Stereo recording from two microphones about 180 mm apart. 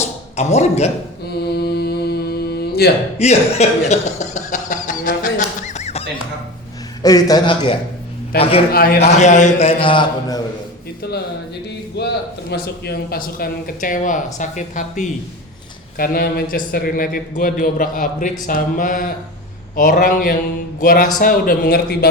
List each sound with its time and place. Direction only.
0.3 s a man's voice: 40° left (ahead or behind)
1.3 s mantra: 65° left (ahead or behind)
3.2 s speech: 35° left (ahead or behind)
7.0 s a man's voice: 20° left (ahead or behind)
8.7 s a man's voice: 55° left (ahead or behind)
9.0 s a man's voice: 40° left (ahead or behind)
11.9 s a man's voice: 70° left (ahead or behind)